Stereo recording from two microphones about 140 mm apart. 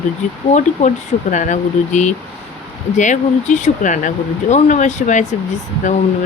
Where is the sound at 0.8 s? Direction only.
60° left (ahead or behind).